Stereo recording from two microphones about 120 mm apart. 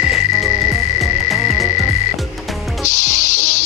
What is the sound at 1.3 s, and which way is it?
Frog, 25° right (ahead or behind).